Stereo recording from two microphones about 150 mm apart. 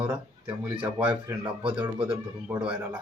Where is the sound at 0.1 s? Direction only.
10° right (ahead or behind).